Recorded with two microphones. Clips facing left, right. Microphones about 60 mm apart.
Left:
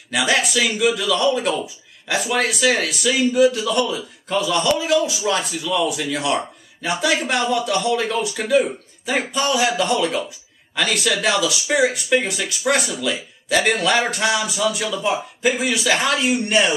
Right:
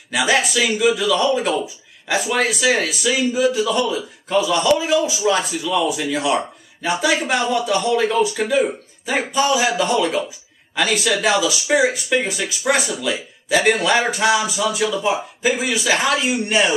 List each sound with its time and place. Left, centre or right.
0.1 s speech: centre